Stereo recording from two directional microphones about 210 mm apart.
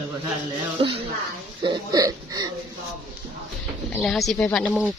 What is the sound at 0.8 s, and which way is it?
Speech, 30° right (ahead or behind).